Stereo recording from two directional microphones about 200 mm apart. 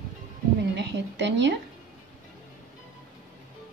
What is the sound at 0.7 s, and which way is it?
Speech, 60° right (ahead or behind).